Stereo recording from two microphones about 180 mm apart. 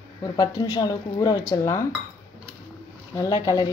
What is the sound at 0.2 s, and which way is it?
Speech, 20° left (ahead or behind).